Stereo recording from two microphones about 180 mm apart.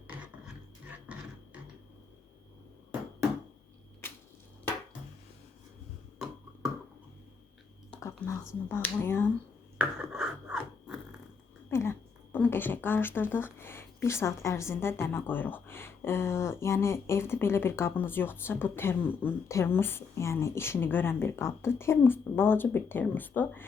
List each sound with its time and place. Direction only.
1.1 s music: 5° right (ahead or behind)
7.9 s whispering: 10° left (ahead or behind)
8.7 s speech: 10° left (ahead or behind)
9.7 s a sound: 5° right (ahead or behind)
11.7 s speech: 15° left (ahead or behind)